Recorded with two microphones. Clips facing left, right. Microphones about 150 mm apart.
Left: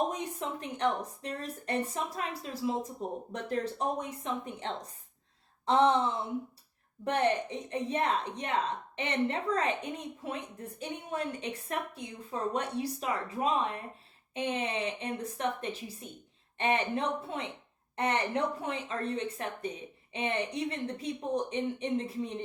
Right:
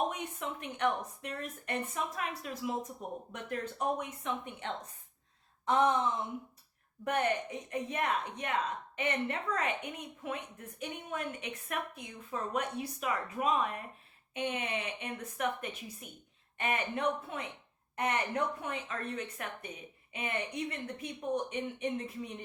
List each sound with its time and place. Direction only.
0.1 s a woman's voice: 35° left (ahead or behind)